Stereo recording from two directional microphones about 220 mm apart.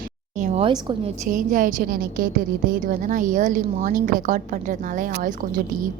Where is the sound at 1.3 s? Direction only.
40° right (ahead or behind).